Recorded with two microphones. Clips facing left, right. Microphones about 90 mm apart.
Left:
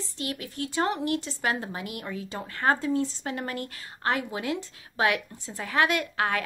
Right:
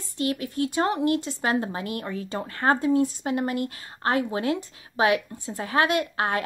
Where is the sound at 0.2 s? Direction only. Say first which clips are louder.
Right 8 dB; 30° right (ahead or behind).